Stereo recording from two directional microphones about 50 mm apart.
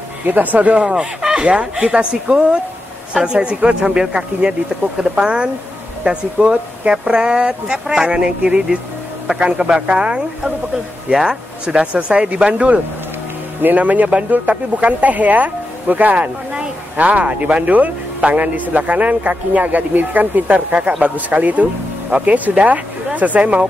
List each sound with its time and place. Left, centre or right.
0.3 s speech: right
1.2 s speech: centre
11.2 s speech: centre
13.6 s a man's voice: right